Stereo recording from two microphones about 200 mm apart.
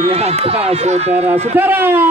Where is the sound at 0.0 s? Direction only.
30° right (ahead or behind).